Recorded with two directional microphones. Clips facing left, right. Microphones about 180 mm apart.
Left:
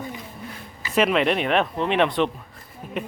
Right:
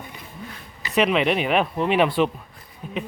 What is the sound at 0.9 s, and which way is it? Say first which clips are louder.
Speech: even; centre (ahead or behind).